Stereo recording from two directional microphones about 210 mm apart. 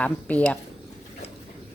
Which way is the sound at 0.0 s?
5° left (ahead or behind).